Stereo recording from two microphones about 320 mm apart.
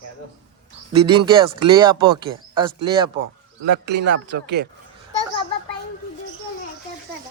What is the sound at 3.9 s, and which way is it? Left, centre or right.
Speech, right.